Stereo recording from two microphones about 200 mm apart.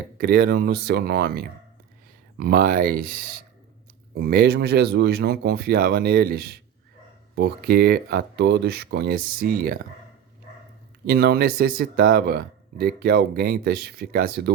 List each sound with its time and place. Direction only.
0.2 s speech: 50° right (ahead or behind)
11.0 s speech: 50° right (ahead or behind)